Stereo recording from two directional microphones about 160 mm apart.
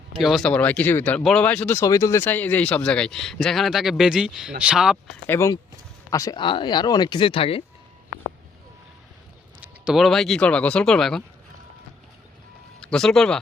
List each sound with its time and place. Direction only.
0.1 s speech: centre (ahead or behind)
5.2 s speech: 15° left (ahead or behind)
6.4 s speech: 30° left (ahead or behind)
9.6 s speech: 5° right (ahead or behind)
12.8 s speech: 5° left (ahead or behind)